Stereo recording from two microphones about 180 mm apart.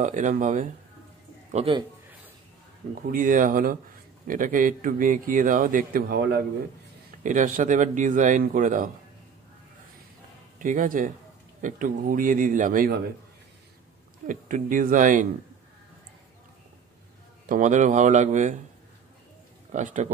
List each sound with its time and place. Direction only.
0.0 s a man's voice: 45° right (ahead or behind)
1.5 s speech: 30° right (ahead or behind)
2.9 s a man's voice: 50° right (ahead or behind)
7.2 s a man's voice: 45° right (ahead or behind)
10.6 s a man's voice: 45° right (ahead or behind)
14.2 s a man's voice: 50° right (ahead or behind)
17.5 s a man's voice: 45° right (ahead or behind)
19.7 s a man's voice: 40° right (ahead or behind)